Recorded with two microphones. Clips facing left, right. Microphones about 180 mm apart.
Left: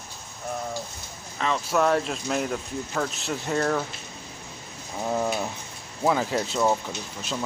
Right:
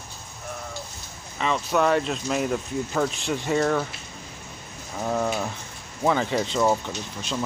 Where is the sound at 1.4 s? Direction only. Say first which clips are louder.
Right 1 dB; centre (ahead or behind).